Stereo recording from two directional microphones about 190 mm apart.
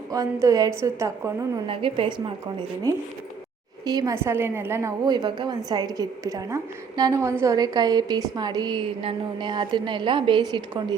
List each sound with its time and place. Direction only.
0.1 s a woman's voice: 15° right (ahead or behind)
1.6 s a woman's voice: 30° right (ahead or behind)